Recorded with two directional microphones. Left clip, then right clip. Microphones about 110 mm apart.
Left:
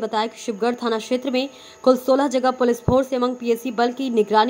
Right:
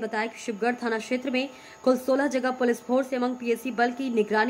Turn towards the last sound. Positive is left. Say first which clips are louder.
# left 7 dB
turn(degrees=40)  # may be behind; listen again after turning